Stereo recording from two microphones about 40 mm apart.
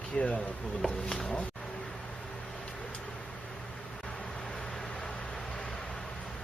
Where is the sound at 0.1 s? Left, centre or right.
Centre.